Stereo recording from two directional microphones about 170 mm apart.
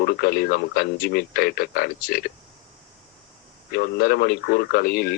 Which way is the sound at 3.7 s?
65° left (ahead or behind).